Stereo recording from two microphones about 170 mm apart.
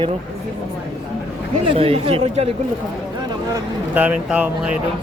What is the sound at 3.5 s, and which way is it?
Speech, 10° right (ahead or behind).